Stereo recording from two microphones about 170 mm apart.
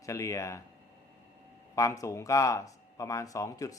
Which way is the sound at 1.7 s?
20° left (ahead or behind).